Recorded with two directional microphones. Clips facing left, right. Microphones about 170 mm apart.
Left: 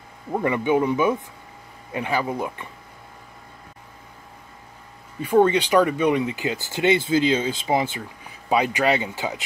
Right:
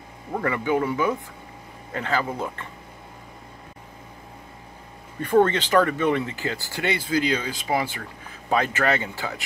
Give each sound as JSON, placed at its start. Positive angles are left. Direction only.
{"t": 0.3, "sound": "speech", "side_deg": 20}
{"t": 5.2, "sound": "speech", "side_deg": 10}